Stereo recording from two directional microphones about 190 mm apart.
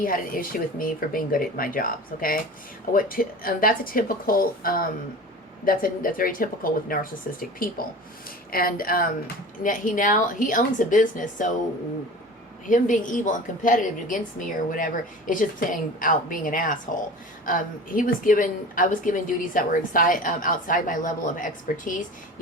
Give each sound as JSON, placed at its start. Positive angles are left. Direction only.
{"t": 0.0, "sound": "a woman's voice", "side_deg": 50}
{"t": 12.6, "sound": "a woman's voice", "side_deg": 45}